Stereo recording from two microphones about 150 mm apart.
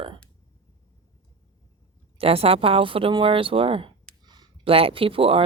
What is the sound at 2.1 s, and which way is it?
Speech, 40° right (ahead or behind).